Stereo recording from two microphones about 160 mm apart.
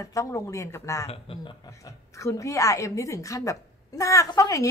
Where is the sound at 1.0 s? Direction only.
35° left (ahead or behind).